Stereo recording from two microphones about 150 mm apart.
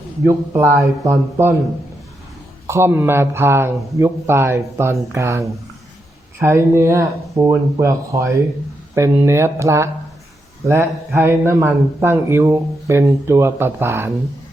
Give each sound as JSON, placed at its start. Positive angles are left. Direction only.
{"t": 0.2, "sound": "a man's voice", "side_deg": -20}
{"t": 2.6, "sound": "a man's voice", "side_deg": -15}